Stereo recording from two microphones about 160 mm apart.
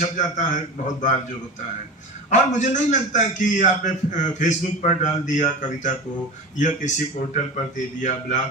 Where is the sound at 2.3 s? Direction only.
50° left (ahead or behind).